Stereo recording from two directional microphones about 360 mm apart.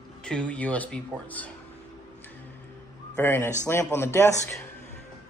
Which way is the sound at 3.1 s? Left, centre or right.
Centre.